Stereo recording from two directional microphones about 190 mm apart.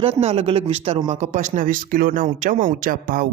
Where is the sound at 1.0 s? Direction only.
40° right (ahead or behind).